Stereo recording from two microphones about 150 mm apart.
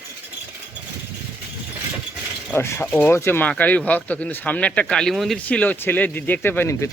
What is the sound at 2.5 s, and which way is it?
Speech, 15° left (ahead or behind).